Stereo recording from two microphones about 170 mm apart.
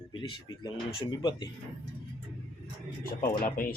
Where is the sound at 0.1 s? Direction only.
30° left (ahead or behind).